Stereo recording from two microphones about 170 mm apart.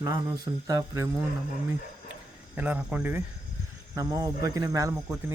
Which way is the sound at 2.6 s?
10° right (ahead or behind).